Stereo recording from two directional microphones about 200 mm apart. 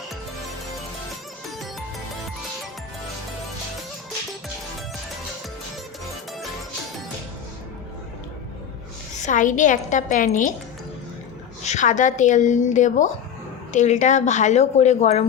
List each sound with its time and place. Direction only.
9.2 s speech: 40° left (ahead or behind)
11.6 s speech: 35° left (ahead or behind)